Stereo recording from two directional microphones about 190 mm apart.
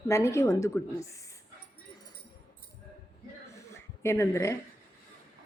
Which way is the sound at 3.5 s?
15° left (ahead or behind).